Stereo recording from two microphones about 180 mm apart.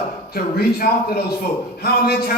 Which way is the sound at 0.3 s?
60° left (ahead or behind).